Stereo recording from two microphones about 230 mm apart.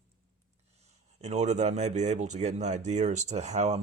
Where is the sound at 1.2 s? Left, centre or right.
Right.